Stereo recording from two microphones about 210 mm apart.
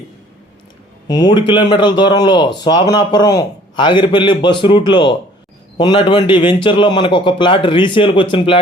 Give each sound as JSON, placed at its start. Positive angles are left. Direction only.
{"t": 1.0, "sound": "a man's voice", "side_deg": 20}